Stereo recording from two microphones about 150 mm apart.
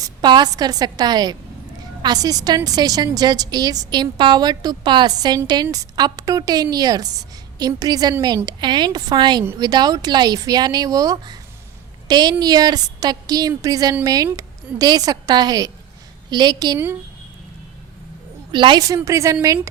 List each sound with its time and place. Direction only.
0.0 s a woman's voice: 30° right (ahead or behind)
18.5 s a woman's voice: 30° right (ahead or behind)